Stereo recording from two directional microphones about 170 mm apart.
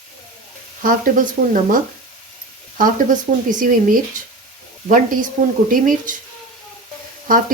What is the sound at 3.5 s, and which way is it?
Speech, 50° right (ahead or behind).